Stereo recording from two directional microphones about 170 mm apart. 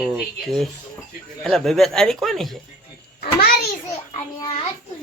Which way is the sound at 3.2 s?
55° left (ahead or behind).